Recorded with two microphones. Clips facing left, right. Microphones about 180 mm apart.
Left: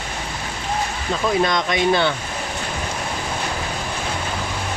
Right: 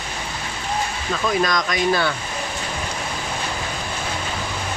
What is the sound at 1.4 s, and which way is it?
Speech, 25° left (ahead or behind).